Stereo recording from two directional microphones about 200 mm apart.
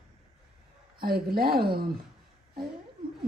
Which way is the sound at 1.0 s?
50° right (ahead or behind).